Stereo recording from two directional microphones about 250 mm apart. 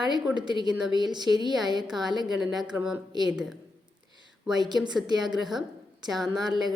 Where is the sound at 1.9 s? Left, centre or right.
Centre.